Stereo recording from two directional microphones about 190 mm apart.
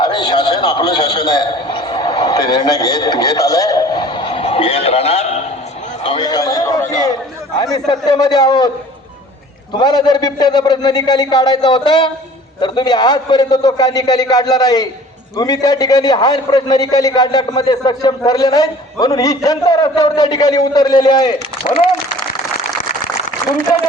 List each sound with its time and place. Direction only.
0.0 s a man's voice: 20° left (ahead or behind)
6.0 s a man's voice: 25° left (ahead or behind)
9.7 s a man's voice: 25° left (ahead or behind)